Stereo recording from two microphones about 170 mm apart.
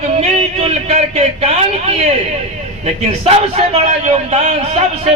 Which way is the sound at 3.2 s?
35° right (ahead or behind).